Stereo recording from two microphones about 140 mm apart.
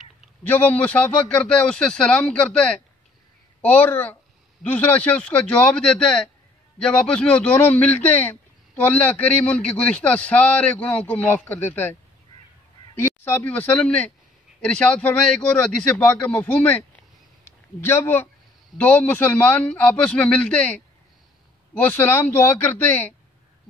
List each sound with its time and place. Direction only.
0.4 s a man's voice: 10° left (ahead or behind)